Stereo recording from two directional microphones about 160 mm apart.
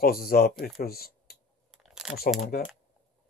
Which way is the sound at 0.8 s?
70° left (ahead or behind).